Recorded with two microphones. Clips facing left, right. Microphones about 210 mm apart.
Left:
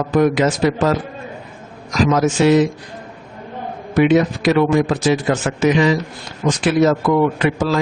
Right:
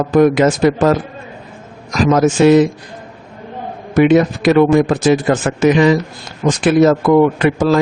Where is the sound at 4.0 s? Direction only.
50° right (ahead or behind).